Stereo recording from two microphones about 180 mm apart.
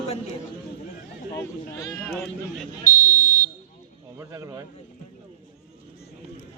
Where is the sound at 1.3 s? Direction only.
20° left (ahead or behind).